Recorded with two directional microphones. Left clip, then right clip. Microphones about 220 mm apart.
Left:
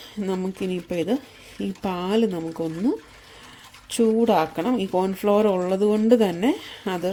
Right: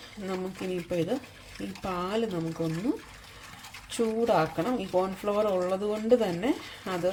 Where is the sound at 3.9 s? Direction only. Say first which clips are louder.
Left 7 dB; 50° left (ahead or behind).